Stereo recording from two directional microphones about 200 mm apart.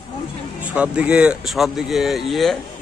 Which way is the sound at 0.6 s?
5° right (ahead or behind).